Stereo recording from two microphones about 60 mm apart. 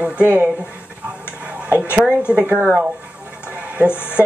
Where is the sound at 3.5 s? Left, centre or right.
Right.